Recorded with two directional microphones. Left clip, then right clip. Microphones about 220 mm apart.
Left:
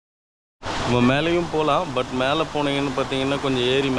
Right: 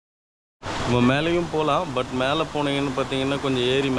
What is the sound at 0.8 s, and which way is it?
Speech, centre (ahead or behind).